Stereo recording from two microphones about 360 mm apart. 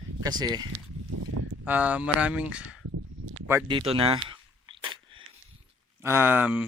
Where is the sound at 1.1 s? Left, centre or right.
Right.